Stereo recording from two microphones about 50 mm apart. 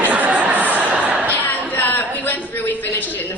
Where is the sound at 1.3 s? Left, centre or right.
Left.